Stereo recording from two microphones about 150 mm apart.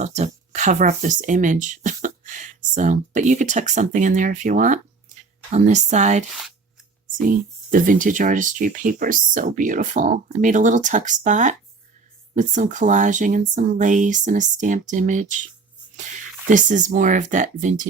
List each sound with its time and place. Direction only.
0.0 s speech: 50° right (ahead or behind)
5.5 s speech: 50° right (ahead or behind)
7.2 s speech: 65° right (ahead or behind)
16.5 s speech: 55° right (ahead or behind)